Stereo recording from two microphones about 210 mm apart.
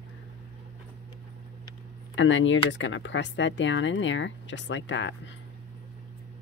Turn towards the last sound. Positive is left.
turn(degrees=60)  # may be behind; listen again after turning